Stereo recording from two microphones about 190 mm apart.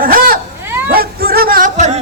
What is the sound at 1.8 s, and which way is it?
Music, 35° right (ahead or behind).